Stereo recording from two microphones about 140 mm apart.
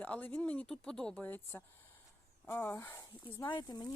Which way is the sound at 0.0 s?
10° left (ahead or behind).